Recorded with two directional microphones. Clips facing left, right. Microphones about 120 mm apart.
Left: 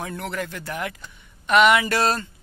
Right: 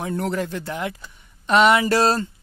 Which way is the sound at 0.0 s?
30° right (ahead or behind).